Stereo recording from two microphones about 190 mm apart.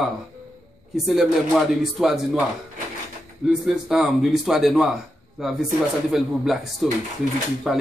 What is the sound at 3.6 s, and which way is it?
A man's voice, centre (ahead or behind).